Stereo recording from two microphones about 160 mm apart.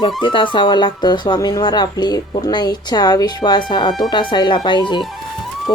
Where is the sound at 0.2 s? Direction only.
30° left (ahead or behind).